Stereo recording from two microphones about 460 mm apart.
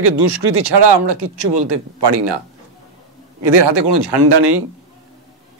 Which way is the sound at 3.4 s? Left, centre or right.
Right.